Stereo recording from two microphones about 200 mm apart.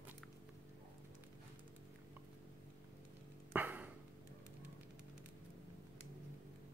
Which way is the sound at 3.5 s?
10° right (ahead or behind).